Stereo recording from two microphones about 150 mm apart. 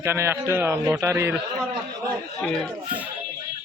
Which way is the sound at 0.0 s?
15° right (ahead or behind).